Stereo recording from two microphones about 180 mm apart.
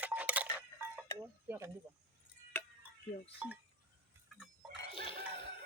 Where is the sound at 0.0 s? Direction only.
10° right (ahead or behind).